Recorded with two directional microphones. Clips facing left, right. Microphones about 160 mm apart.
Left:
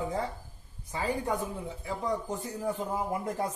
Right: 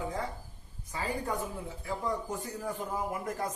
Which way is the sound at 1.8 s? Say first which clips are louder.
Left 1 dB; 20° left (ahead or behind).